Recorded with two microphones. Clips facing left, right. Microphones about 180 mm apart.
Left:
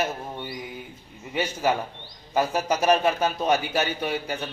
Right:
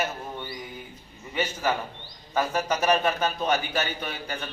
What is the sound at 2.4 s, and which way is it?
A man's voice, 15° left (ahead or behind).